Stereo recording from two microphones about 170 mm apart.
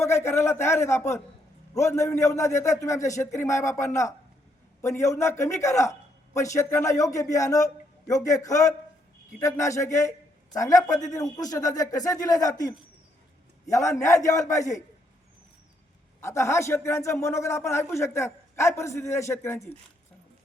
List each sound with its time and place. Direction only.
0.0 s a man's voice: 15° left (ahead or behind)
13.7 s a man's voice: 15° left (ahead or behind)
16.2 s a man's voice: 15° left (ahead or behind)